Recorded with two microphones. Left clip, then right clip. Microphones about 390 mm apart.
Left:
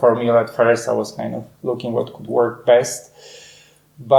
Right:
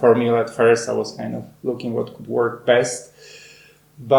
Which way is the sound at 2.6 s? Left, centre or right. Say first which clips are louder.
Left 3 dB; left.